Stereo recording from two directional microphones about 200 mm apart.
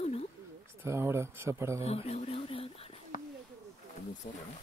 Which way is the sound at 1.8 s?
30° left (ahead or behind).